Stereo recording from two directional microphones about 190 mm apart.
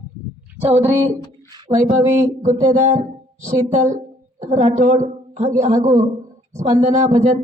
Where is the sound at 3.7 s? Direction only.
40° right (ahead or behind).